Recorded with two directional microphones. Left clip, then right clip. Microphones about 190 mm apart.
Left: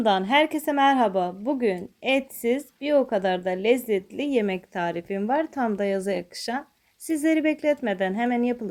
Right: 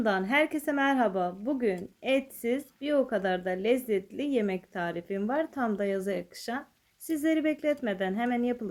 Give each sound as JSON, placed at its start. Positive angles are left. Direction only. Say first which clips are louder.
{"t": 0.0, "sound": "a woman's voice", "louder": "left 6 dB", "side_deg": 20}